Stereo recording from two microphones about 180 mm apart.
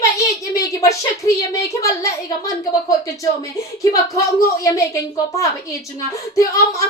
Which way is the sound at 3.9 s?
20° left (ahead or behind).